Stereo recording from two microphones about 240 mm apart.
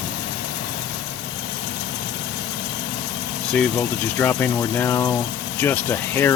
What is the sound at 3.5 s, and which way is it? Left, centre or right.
Speech, centre.